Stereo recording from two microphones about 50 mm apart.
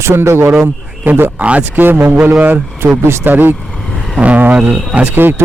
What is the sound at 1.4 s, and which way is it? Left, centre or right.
Speech, right.